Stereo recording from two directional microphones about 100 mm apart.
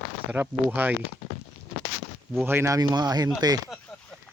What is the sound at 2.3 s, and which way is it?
Speech, 25° right (ahead or behind).